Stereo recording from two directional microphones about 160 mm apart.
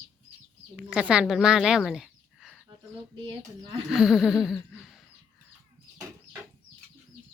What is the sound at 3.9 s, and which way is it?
Speech, 5° right (ahead or behind).